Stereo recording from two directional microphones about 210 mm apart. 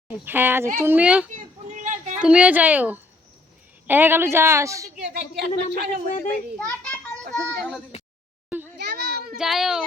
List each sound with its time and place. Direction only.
0.3 s a woman's voice: 10° right (ahead or behind)
1.4 s a sound: 35° right (ahead or behind)
2.1 s a woman's voice: 5° right (ahead or behind)
5.5 s speech: 35° left (ahead or behind)
6.6 s a child's voice: 5° left (ahead or behind)
8.8 s children playing: 45° right (ahead or behind)
9.4 s a child's voice: centre (ahead or behind)